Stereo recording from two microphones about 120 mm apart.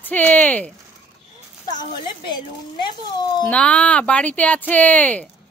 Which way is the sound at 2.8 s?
40° left (ahead or behind).